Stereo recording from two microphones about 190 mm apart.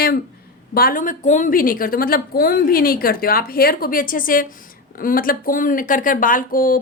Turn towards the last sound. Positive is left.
turn(degrees=45)  # may be behind; listen again after turning